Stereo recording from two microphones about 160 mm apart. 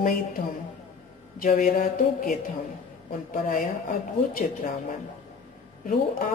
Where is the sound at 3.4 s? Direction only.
60° left (ahead or behind).